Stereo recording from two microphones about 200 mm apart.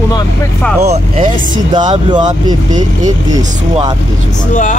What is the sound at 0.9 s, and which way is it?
Speech, 35° right (ahead or behind).